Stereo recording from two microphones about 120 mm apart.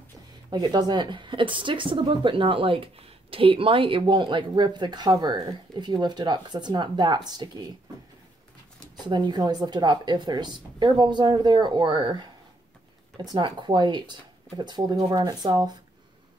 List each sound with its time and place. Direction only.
0.5 s a woman's voice: 35° right (ahead or behind)
8.9 s a woman's voice: 40° right (ahead or behind)